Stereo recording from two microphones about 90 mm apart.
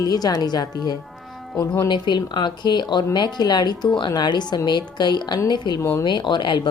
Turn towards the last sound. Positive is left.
turn(degrees=60)  # may be behind; listen again after turning